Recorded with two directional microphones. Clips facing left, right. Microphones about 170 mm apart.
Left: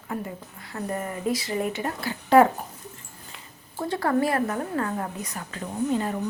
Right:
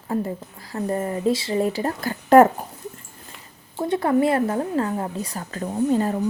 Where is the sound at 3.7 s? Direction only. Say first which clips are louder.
Right 4 dB; 20° right (ahead or behind).